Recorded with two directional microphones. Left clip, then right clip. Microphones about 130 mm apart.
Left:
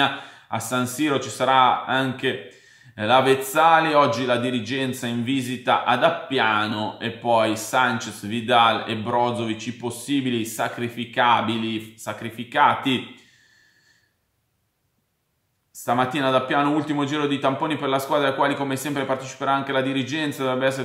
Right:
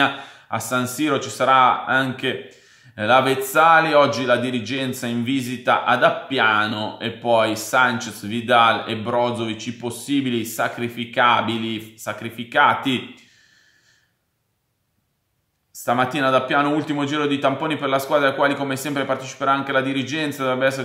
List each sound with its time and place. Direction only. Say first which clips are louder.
0.0 s speech: right 2 dB; 30° right (ahead or behind)
15.8 s speech: right 2 dB; 25° right (ahead or behind)